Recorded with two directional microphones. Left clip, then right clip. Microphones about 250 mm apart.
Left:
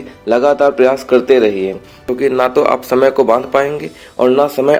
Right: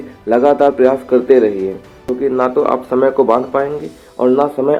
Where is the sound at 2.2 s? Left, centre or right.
Left.